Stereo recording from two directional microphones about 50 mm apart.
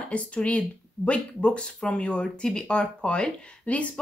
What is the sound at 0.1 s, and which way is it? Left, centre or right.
Speech, left.